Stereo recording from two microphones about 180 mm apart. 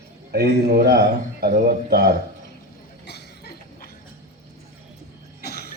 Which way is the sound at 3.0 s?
65° left (ahead or behind).